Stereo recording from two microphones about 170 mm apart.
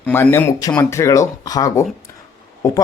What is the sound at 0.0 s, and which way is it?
Speech, 10° left (ahead or behind).